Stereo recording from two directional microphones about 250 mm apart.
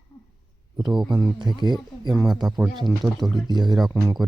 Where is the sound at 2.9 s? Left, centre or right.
Centre.